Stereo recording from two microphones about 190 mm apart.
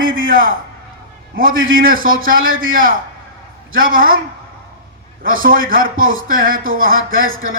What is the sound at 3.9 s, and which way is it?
Speech, 45° right (ahead or behind).